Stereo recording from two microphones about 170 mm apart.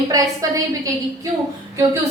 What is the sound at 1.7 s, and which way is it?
Speech, 20° right (ahead or behind).